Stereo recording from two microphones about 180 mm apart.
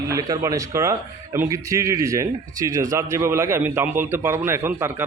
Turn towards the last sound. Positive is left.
turn(degrees=-15)  # may be behind; listen again after turning